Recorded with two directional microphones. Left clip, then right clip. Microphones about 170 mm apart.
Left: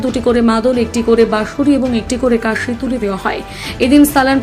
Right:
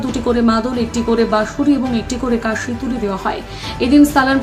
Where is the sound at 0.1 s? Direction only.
10° left (ahead or behind).